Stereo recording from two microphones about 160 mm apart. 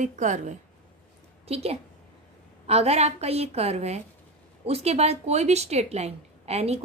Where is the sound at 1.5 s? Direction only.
40° right (ahead or behind).